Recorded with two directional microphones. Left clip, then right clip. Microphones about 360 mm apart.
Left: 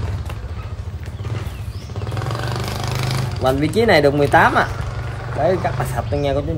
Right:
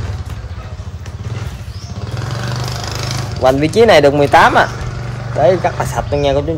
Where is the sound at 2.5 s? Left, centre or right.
Left.